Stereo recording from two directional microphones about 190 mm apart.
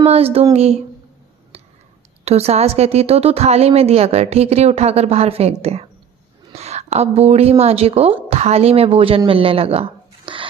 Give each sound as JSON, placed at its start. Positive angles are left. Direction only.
{"t": 0.0, "sound": "speech", "side_deg": -30}
{"t": 2.2, "sound": "a woman's voice", "side_deg": -35}